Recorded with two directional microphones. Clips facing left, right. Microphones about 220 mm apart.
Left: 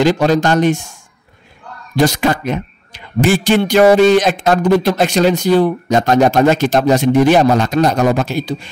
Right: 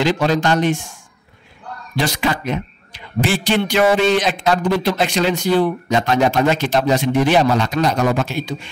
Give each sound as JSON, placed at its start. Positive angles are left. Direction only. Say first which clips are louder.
{"t": 0.0, "sound": "a man's voice", "louder": "left 4 dB", "side_deg": 45}
{"t": 2.0, "sound": "a man's voice", "louder": "left 6 dB", "side_deg": 45}